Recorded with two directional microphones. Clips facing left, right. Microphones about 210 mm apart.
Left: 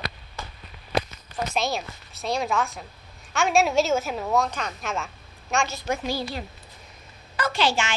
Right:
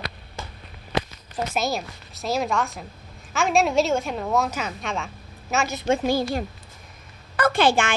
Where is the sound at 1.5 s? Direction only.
Centre (ahead or behind).